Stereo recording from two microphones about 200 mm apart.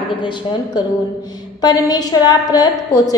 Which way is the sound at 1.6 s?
20° left (ahead or behind).